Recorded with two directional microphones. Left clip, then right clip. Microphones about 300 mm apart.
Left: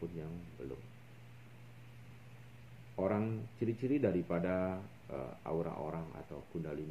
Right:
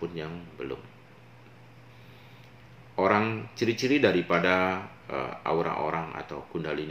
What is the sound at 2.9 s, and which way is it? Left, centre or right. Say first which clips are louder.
Speech: right 12 dB; centre.